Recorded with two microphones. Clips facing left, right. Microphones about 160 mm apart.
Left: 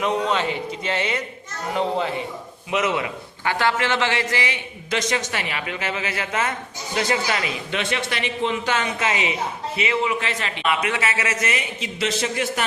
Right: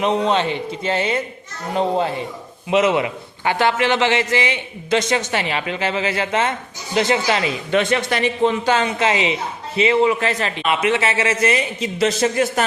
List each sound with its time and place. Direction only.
0.0 s a man's voice: 25° right (ahead or behind)
2.6 s a man's voice: 25° right (ahead or behind)
7.7 s a man's voice: 45° right (ahead or behind)
10.7 s a man's voice: 25° right (ahead or behind); by 12.6 s 40° right (ahead or behind)